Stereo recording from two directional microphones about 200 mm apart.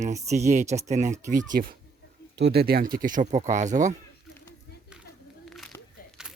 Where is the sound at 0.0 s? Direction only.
35° right (ahead or behind).